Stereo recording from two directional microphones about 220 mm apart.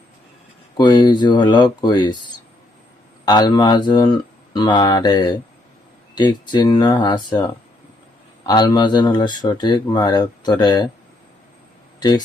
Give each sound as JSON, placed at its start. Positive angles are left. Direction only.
{"t": 0.8, "sound": "speech", "side_deg": 20}
{"t": 3.2, "sound": "speech", "side_deg": 20}
{"t": 11.9, "sound": "speech", "side_deg": 20}